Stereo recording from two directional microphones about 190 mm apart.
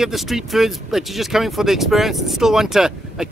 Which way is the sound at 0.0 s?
Centre (ahead or behind).